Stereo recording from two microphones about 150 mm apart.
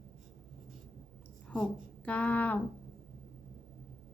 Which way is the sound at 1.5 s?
5° left (ahead or behind).